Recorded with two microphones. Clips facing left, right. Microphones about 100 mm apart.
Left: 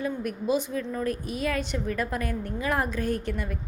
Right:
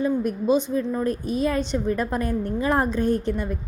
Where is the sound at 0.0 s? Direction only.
25° right (ahead or behind).